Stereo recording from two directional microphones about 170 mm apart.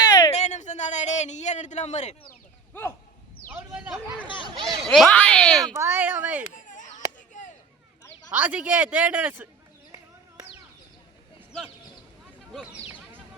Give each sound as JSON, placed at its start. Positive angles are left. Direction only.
{"t": 0.0, "sound": "a sound", "side_deg": 20}
{"t": 0.3, "sound": "a sound", "side_deg": 45}
{"t": 3.7, "sound": "speech", "side_deg": 0}
{"t": 4.5, "sound": "speech", "side_deg": -25}
{"t": 4.8, "sound": "speech", "side_deg": 0}
{"t": 5.7, "sound": "a man's voice", "side_deg": -15}
{"t": 6.5, "sound": "chop", "side_deg": 50}
{"t": 8.3, "sound": "a man's voice", "side_deg": -10}